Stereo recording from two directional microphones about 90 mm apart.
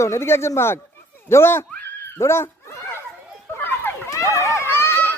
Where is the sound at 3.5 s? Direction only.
25° left (ahead or behind).